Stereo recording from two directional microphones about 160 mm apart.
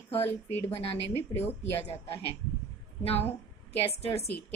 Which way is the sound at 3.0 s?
40° left (ahead or behind).